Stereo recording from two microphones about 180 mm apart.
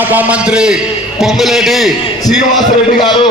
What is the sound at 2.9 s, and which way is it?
Speech, 25° left (ahead or behind).